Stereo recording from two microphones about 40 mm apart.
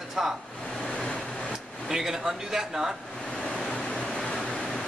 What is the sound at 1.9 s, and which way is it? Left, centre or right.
Speech, centre.